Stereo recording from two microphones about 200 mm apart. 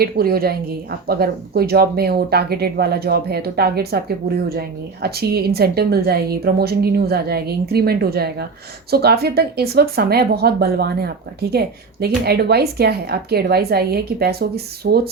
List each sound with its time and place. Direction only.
0.0 s a woman's voice: 50° right (ahead or behind)